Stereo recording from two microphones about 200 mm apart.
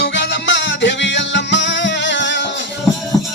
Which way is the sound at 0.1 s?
65° left (ahead or behind).